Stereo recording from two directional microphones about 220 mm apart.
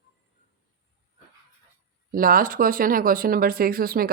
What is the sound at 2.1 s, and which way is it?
Speech, 40° right (ahead or behind).